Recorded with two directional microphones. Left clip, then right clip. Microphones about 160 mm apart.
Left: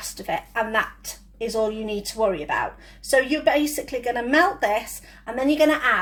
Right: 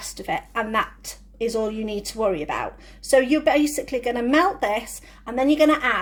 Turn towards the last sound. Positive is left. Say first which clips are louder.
# right 1 dB
turn(degrees=-30)  # may be behind; listen again after turning